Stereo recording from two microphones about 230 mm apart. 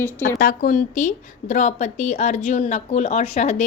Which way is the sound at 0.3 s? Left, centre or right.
Left.